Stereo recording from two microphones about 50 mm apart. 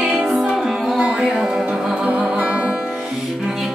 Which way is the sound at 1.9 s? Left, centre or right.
Right.